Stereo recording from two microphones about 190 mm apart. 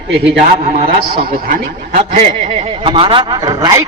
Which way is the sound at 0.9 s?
50° right (ahead or behind).